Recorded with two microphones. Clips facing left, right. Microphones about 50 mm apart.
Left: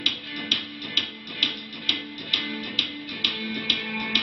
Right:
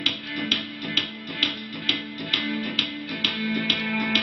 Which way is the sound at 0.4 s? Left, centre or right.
Right.